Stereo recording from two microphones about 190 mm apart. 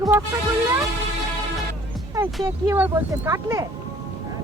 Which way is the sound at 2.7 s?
10° right (ahead or behind).